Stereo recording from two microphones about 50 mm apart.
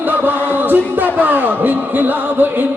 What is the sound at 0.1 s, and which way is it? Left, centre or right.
Music, right.